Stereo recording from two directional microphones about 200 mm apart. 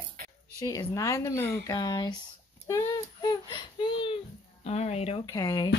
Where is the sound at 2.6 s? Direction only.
20° left (ahead or behind).